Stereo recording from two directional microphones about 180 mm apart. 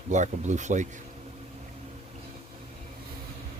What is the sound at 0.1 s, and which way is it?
Speech, 40° right (ahead or behind).